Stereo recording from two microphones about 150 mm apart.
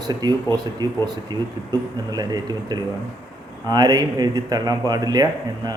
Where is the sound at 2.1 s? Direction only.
25° right (ahead or behind).